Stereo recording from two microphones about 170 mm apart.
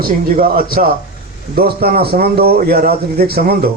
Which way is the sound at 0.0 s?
60° right (ahead or behind).